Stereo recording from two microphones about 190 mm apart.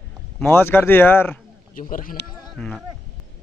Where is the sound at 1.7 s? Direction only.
45° left (ahead or behind).